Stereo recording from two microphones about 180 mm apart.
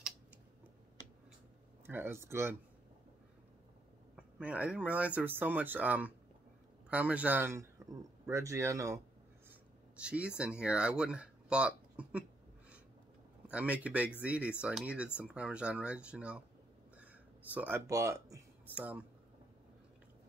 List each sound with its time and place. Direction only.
1.9 s speech: 10° right (ahead or behind)
4.2 s speech: 5° right (ahead or behind)
9.5 s a sound: 5° right (ahead or behind)
10.6 s speech: 5° right (ahead or behind)
13.5 s speech: 5° right (ahead or behind)